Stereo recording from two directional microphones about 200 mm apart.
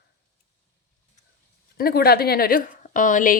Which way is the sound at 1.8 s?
50° left (ahead or behind).